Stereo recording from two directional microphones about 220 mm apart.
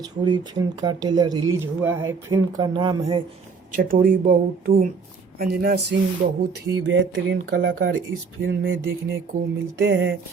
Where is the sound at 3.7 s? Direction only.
40° right (ahead or behind).